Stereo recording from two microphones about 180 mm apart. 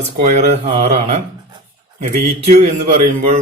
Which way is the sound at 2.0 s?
45° right (ahead or behind).